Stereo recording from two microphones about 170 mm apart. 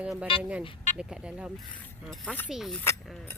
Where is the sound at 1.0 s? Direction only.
5° right (ahead or behind).